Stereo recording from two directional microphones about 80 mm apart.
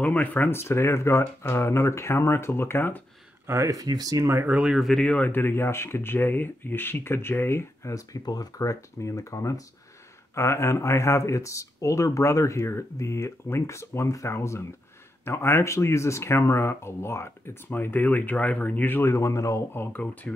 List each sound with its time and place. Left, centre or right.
0.0 s speech: left
3.4 s speech: right
4.5 s speech: centre
4.7 s speech: centre
5.0 s speech: centre
7.9 s speech: left